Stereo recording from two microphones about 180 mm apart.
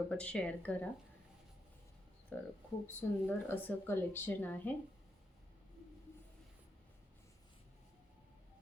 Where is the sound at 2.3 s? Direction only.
10° left (ahead or behind).